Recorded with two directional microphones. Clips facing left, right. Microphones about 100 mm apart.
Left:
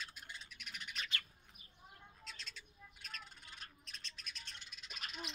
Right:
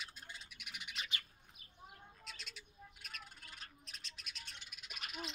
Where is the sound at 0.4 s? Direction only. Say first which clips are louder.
Left 1 dB; 15° right (ahead or behind).